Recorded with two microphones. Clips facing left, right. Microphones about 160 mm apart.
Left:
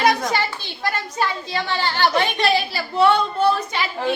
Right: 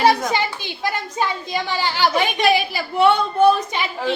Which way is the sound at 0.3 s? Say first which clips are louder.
Right 1 dB; 15° right (ahead or behind).